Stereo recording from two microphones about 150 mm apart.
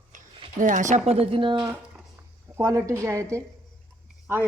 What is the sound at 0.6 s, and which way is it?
Speech, 55° right (ahead or behind).